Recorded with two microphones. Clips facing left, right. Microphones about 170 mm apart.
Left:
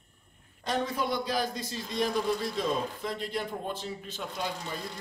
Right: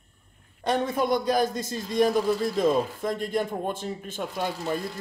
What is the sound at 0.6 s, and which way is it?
Speech, 50° right (ahead or behind).